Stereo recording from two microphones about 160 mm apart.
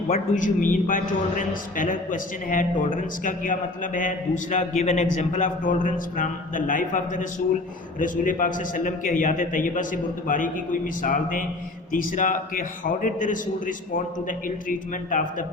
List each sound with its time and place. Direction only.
0.1 s a man's voice: 55° left (ahead or behind)